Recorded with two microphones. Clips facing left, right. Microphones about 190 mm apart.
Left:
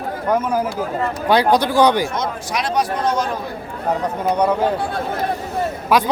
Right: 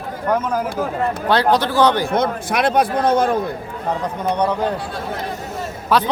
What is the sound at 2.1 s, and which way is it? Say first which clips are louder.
Speech: right 4 dB; 55° right (ahead or behind).